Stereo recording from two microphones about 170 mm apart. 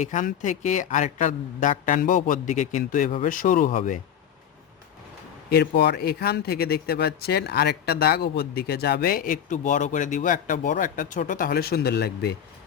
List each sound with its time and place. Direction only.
0.0 s a man's voice: 45° left (ahead or behind)
5.5 s speech: 75° left (ahead or behind)